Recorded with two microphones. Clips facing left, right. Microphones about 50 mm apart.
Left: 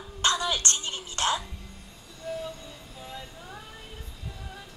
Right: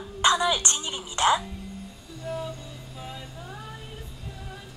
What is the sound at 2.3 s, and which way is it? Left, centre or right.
Music, centre.